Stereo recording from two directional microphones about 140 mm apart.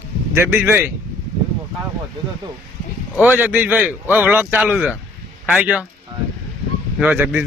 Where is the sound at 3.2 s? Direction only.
15° right (ahead or behind).